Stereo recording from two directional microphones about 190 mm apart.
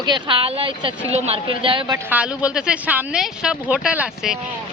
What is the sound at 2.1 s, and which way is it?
A woman's voice, 5° right (ahead or behind).